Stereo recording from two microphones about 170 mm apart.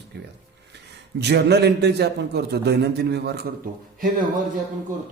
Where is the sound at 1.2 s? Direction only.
80° right.